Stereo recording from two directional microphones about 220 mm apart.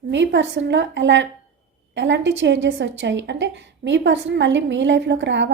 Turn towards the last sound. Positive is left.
turn(degrees=-55)  # may be behind; listen again after turning